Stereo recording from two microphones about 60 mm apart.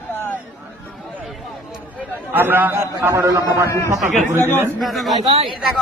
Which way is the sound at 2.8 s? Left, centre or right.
Right.